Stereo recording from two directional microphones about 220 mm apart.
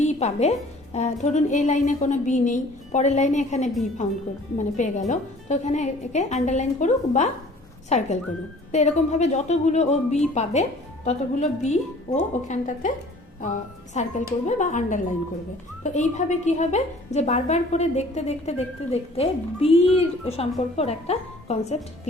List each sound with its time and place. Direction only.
0.0 s music: 30° left (ahead or behind)
0.9 s a woman's voice: 30° left (ahead or behind)